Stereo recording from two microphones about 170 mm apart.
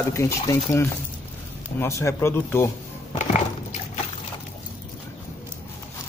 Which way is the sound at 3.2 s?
45° left (ahead or behind).